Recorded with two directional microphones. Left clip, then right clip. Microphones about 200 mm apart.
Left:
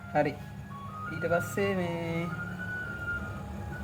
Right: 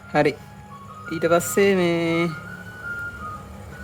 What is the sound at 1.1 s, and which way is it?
Speech, 55° right (ahead or behind).